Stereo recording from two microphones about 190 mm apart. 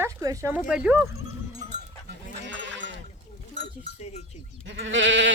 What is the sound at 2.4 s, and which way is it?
Goat, 75° right (ahead or behind).